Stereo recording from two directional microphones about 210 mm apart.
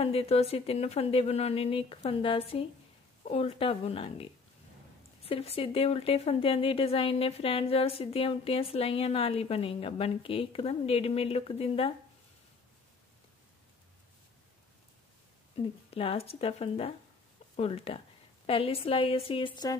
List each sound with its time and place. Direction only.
0.0 s speech: 30° left (ahead or behind)
15.5 s speech: 25° left (ahead or behind)